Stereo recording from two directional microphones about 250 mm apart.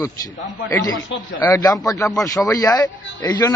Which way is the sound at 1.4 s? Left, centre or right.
Centre.